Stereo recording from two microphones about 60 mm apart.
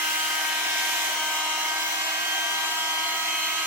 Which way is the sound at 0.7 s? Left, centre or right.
Right.